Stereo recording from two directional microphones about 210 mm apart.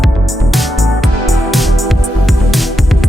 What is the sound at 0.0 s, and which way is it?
Music, centre (ahead or behind).